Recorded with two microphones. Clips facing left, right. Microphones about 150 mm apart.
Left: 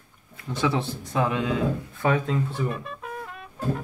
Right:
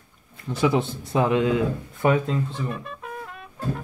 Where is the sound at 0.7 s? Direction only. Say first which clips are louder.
Right 4 dB; 25° right (ahead or behind).